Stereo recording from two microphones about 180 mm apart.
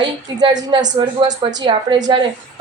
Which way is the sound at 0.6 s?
20° right (ahead or behind).